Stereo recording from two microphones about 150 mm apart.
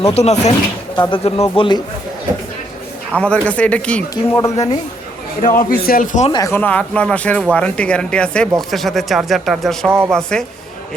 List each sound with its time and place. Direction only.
0.1 s speech: 45° left (ahead or behind)
0.9 s speech: 25° left (ahead or behind)
1.2 s speech: 40° left (ahead or behind)
3.1 s speech: 5° left (ahead or behind)
4.1 s speech: 20° left (ahead or behind)
5.4 s a man's voice: 65° left (ahead or behind)
6.4 s speech: 15° left (ahead or behind)